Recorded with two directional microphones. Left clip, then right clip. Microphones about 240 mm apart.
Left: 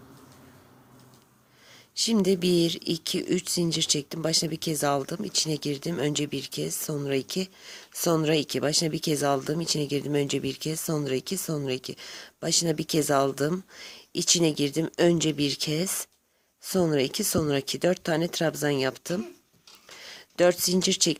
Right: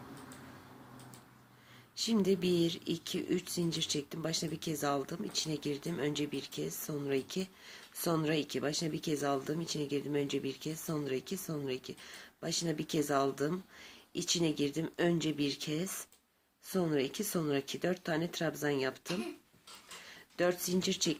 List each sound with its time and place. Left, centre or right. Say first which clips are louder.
2.0 s speech: left 7 dB; left